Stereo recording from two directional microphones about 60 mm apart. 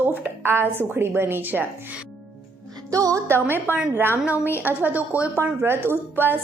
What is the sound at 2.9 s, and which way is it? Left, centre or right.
Speech, right.